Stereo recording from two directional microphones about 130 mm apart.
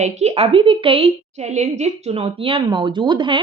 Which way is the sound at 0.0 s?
60° right (ahead or behind).